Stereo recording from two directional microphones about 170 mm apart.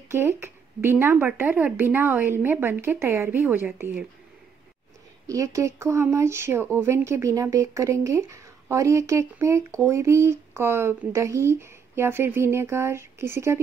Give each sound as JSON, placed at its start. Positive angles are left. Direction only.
{"t": 0.1, "sound": "speech", "side_deg": -15}
{"t": 5.2, "sound": "speech", "side_deg": -20}